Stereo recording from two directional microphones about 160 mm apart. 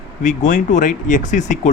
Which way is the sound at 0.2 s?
50° left (ahead or behind).